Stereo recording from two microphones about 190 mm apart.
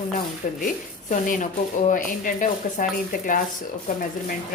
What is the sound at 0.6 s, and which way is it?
Speech, 45° left (ahead or behind).